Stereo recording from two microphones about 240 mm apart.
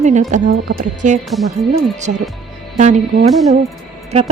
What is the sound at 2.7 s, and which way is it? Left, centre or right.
Speech, right.